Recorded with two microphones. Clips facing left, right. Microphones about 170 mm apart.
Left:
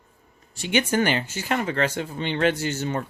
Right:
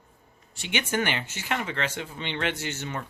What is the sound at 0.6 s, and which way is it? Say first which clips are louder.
Speech: left 6 dB; 40° left (ahead or behind).